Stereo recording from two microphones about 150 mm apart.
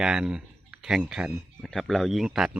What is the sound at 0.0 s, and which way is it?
Speech, 5° right (ahead or behind).